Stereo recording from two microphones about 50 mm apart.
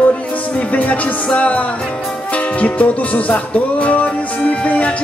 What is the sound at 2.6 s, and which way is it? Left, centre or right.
Music, left.